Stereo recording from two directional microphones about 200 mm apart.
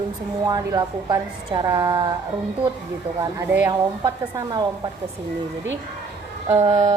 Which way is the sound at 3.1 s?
15° right (ahead or behind).